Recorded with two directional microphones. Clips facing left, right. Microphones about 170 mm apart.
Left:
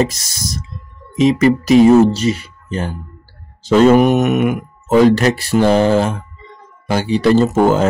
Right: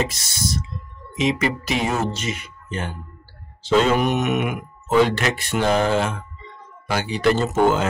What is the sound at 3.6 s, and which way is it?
Speech, 45° left (ahead or behind).